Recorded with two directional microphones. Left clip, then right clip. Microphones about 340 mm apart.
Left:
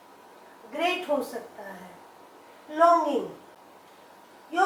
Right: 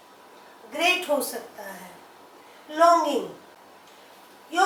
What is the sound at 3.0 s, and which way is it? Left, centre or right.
Speech, left.